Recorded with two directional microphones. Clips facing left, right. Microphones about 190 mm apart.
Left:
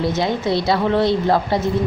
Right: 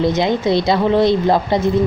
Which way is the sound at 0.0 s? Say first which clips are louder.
Right 4 dB; 20° right (ahead or behind).